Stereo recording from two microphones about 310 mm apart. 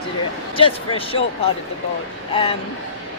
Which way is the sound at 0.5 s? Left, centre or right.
Centre.